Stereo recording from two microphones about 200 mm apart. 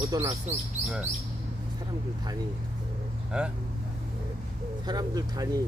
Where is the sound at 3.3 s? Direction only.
5° right (ahead or behind).